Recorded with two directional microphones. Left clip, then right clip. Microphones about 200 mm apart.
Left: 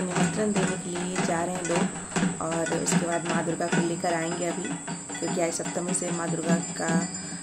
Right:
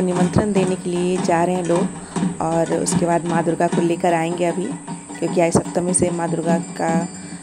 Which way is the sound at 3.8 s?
35° right (ahead or behind).